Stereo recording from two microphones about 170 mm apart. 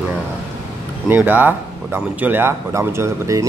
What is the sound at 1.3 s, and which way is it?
A man's voice, 10° right (ahead or behind).